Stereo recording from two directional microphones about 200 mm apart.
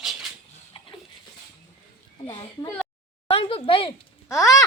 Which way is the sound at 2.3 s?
20° left (ahead or behind).